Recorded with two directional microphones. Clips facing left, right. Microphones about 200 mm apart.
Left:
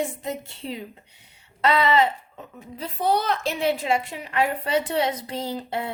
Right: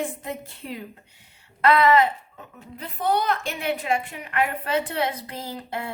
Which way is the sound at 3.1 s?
30° left (ahead or behind).